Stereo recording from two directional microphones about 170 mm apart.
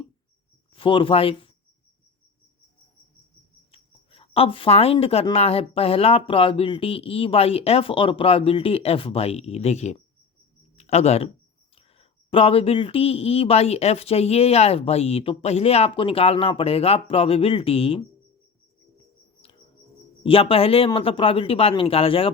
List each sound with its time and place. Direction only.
0.7 s speech: 30° left (ahead or behind)
3.7 s a sound: 35° left (ahead or behind)
5.3 s speech: 35° left (ahead or behind)
20.2 s speech: 35° left (ahead or behind)